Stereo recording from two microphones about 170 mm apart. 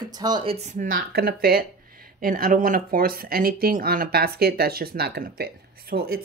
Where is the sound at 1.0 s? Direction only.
65° right (ahead or behind).